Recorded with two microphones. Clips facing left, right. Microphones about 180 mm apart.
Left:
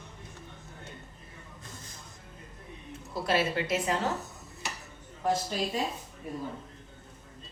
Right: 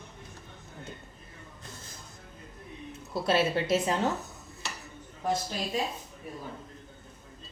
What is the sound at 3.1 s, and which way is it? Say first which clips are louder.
Speech: right 2 dB; 25° right (ahead or behind).